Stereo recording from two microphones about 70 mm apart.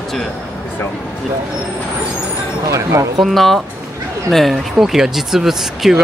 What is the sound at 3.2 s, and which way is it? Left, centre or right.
Speech, centre.